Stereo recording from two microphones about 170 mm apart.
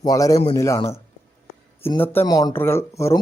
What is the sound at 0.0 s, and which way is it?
Speech, 20° left (ahead or behind).